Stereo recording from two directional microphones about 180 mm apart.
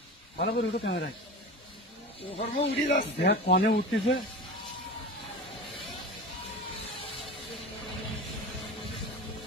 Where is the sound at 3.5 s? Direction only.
85° left.